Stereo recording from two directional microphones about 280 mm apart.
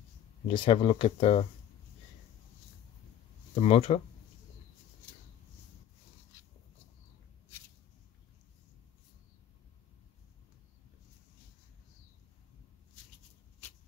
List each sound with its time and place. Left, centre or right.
0.5 s speech: centre
3.5 s speech: left